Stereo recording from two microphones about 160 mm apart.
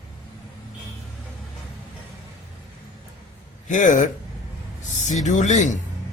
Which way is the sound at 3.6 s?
50° left (ahead or behind).